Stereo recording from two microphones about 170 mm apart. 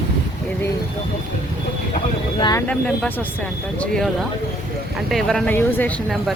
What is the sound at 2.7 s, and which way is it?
Speech, 5° left (ahead or behind).